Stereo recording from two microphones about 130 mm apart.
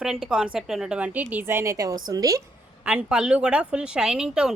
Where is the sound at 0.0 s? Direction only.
5° right (ahead or behind); by 2.4 s 25° right (ahead or behind).